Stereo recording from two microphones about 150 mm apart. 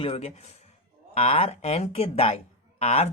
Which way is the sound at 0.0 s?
40° left (ahead or behind).